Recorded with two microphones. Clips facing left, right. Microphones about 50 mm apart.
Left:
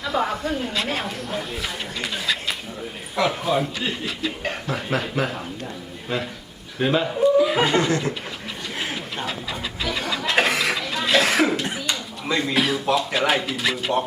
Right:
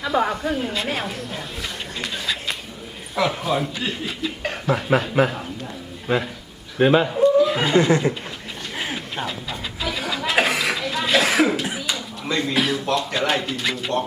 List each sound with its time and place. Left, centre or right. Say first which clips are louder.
0.0 s a woman's voice: right 2 dB; centre
2.0 s a sound: left 1 dB; centre
3.2 s speech: even; centre
4.9 s a man's voice: right 5 dB; centre
7.2 s chuckle: right 1 dB; centre
7.9 s speech: right 4 dB; right
8.8 s a sound: right 2 dB; centre
9.8 s cough: even; centre